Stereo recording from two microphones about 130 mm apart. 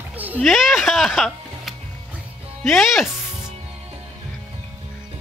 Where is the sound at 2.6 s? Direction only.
Centre (ahead or behind).